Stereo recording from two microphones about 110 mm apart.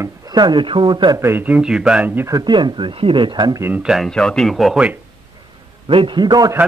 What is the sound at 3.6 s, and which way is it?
Speech, 15° right (ahead or behind).